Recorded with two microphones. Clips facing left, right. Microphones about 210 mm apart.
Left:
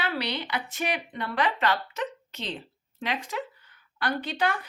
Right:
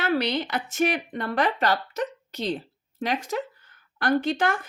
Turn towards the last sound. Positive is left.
turn(degrees=-50)  # may be behind; listen again after turning